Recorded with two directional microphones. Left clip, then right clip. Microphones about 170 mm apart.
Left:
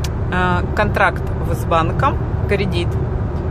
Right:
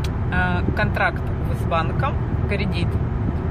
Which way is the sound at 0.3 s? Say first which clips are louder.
Left 5 dB; 15° left (ahead or behind).